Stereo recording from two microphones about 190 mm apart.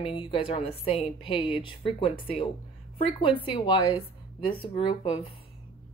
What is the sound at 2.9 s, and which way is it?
A woman's voice, 30° left (ahead or behind).